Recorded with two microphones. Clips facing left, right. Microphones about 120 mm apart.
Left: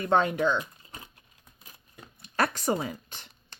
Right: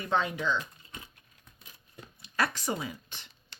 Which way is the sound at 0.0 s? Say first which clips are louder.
Left 6 dB; 50° left (ahead or behind).